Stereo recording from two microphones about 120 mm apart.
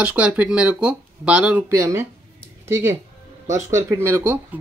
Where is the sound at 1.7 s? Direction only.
25° right (ahead or behind).